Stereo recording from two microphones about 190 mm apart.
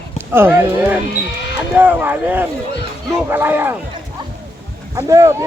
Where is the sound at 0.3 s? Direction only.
10° right (ahead or behind).